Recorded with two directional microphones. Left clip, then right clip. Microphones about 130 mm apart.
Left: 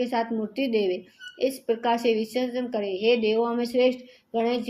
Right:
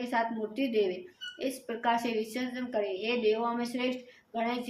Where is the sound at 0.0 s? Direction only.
40° left (ahead or behind).